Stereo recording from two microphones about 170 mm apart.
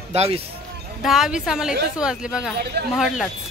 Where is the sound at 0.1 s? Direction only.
40° right (ahead or behind).